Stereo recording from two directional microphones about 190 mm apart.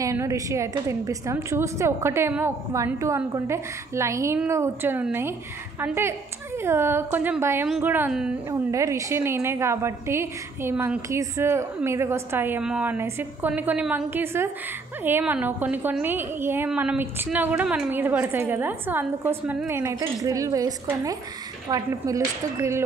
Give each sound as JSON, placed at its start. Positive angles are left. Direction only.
{"t": 0.0, "sound": "a woman's voice", "side_deg": -15}
{"t": 8.5, "sound": "a woman's voice", "side_deg": -15}